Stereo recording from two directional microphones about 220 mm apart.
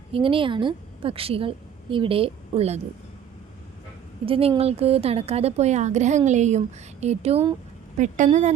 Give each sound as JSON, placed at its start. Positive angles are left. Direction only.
{"t": 0.1, "sound": "a woman's voice", "side_deg": -25}
{"t": 4.3, "sound": "a woman's voice", "side_deg": -25}